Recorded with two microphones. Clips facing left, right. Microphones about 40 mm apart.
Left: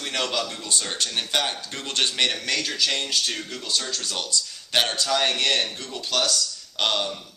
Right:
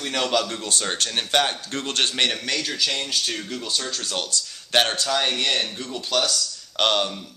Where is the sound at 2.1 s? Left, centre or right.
Centre.